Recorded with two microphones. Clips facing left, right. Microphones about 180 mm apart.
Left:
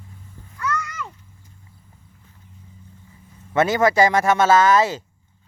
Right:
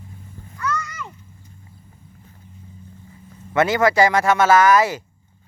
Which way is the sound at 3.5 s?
20° left (ahead or behind).